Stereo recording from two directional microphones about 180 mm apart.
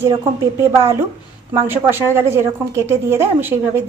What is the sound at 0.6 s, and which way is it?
A woman's voice, 15° right (ahead or behind).